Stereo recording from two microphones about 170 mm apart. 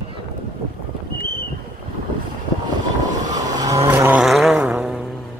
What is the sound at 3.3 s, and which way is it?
Vehicle, 20° right (ahead or behind).